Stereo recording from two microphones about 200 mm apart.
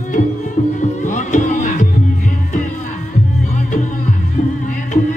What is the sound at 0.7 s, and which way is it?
Music, 40° left (ahead or behind).